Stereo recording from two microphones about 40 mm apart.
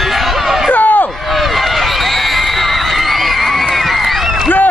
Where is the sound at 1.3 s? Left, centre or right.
Centre.